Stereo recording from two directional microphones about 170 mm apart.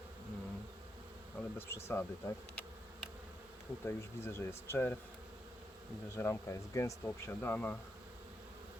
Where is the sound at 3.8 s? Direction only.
15° left (ahead or behind).